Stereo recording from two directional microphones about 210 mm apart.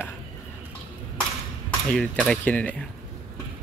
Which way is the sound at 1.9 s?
5° left (ahead or behind).